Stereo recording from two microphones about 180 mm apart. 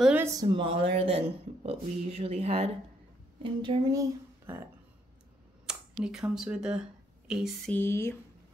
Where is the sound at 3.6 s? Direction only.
25° right (ahead or behind).